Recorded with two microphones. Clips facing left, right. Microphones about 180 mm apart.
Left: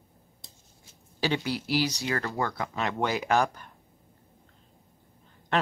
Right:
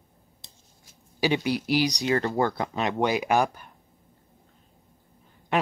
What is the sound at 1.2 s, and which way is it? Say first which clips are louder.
Speech: right 4 dB; 15° right (ahead or behind).